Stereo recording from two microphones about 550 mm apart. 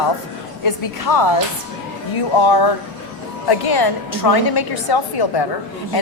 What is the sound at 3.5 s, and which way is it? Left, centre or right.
A woman's voice, left.